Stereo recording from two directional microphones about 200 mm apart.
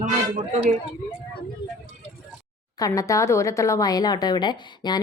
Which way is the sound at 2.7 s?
15° left (ahead or behind).